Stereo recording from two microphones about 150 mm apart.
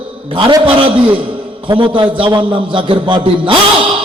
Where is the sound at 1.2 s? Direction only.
35° right (ahead or behind).